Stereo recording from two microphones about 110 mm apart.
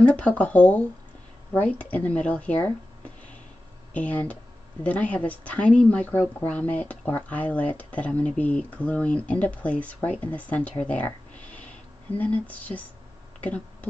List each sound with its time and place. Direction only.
0.0 s speech: 10° left (ahead or behind)
10.8 s a sound: 10° left (ahead or behind)
12.2 s speech: 15° left (ahead or behind)